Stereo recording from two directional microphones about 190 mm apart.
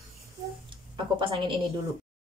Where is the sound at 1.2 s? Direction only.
25° right (ahead or behind).